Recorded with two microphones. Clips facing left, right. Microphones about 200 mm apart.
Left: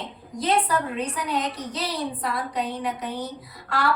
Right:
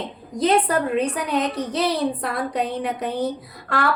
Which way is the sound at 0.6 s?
60° right (ahead or behind).